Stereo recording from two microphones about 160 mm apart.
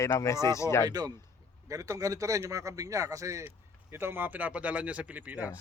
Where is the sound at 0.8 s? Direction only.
25° right (ahead or behind).